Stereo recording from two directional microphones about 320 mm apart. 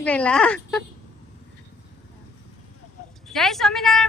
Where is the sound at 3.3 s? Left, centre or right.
Centre.